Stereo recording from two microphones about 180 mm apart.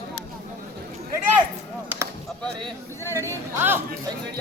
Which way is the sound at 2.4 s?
5° left (ahead or behind).